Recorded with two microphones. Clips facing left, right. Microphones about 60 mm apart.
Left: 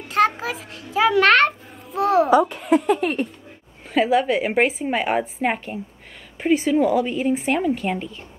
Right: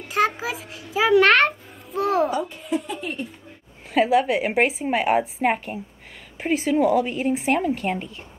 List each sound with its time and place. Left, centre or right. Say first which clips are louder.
0.1 s a sound: left 3 dB; centre
2.3 s a woman's voice: left 9 dB; left
3.9 s a woman's voice: even; centre